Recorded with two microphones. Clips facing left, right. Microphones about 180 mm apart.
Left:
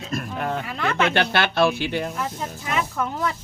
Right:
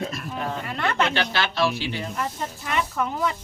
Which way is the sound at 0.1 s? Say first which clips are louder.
Left 3 dB; 55° left (ahead or behind).